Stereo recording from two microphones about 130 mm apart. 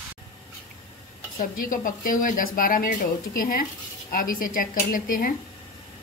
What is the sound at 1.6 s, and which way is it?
Speech, 90° left.